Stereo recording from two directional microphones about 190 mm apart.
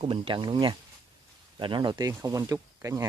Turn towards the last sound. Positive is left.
turn(degrees=-15)  # may be behind; listen again after turning